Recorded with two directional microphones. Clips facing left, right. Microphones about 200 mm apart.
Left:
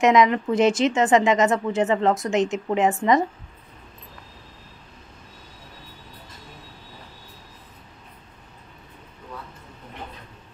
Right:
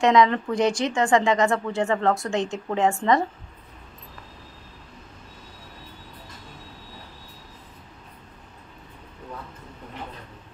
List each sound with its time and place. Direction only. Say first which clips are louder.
0.0 s a woman's voice: left 1 dB; 20° left (ahead or behind)